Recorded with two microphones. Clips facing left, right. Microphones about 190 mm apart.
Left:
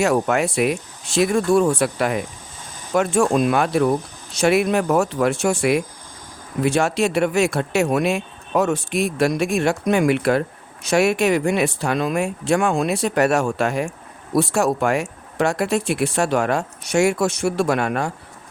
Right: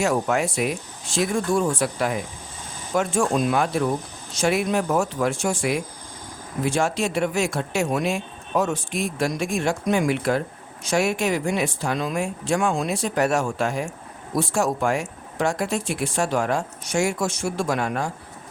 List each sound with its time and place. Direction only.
0.0 s speech: 65° left (ahead or behind)